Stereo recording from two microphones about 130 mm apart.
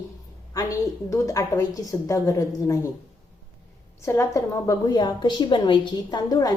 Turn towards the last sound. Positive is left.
turn(degrees=30)  # may be behind; listen again after turning